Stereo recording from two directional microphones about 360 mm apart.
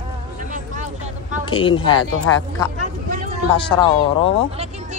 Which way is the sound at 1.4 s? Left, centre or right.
Centre.